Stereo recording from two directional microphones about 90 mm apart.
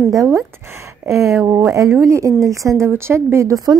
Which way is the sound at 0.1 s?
40° right (ahead or behind).